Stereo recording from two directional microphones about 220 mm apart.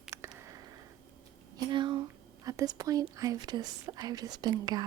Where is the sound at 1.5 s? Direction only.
20° right (ahead or behind).